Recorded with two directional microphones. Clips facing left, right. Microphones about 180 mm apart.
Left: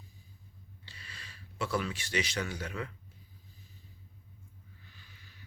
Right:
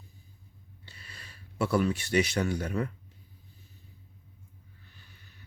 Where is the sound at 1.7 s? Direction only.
55° right (ahead or behind).